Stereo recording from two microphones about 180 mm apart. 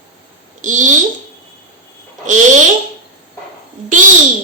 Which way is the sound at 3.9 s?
45° right (ahead or behind).